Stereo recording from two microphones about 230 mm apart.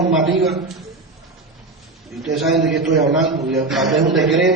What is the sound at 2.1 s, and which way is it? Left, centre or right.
A man's voice, centre.